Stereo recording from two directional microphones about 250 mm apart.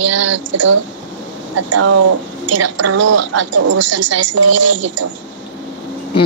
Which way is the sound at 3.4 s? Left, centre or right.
Right.